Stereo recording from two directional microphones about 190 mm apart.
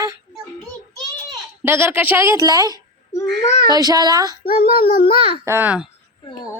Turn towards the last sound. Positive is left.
turn(degrees=-10)  # may be behind; listen again after turning